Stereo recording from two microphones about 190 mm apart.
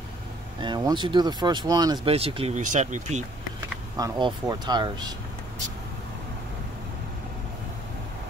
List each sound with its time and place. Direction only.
0.6 s speech: 25° right (ahead or behind)
3.9 s speech: 20° right (ahead or behind)